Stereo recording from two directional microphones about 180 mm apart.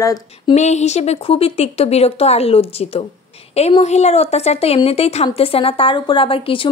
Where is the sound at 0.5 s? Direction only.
40° left (ahead or behind).